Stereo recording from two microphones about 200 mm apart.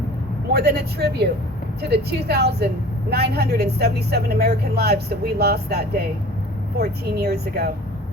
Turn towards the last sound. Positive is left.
turn(degrees=-50)  # may be behind; listen again after turning